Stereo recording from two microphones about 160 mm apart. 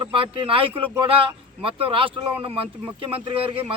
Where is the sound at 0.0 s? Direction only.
30° right (ahead or behind).